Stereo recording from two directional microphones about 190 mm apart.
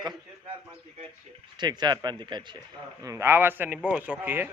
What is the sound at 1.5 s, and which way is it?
A man's voice, 20° right (ahead or behind).